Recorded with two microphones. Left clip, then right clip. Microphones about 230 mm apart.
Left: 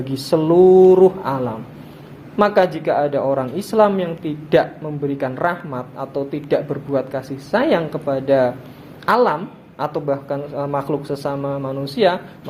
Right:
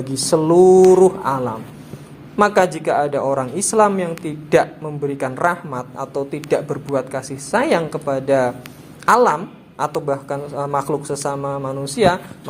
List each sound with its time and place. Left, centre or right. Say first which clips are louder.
0.0 s a man's voice: right 1 dB; right